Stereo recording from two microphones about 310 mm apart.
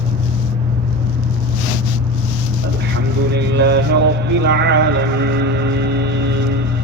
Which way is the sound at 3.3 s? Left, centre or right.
Right.